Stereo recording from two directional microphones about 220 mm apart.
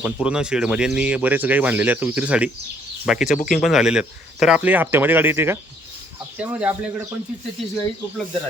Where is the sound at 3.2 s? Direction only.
35° left (ahead or behind).